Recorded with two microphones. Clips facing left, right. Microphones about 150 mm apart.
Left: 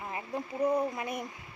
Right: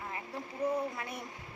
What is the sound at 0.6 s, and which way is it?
Speech, 15° left (ahead or behind).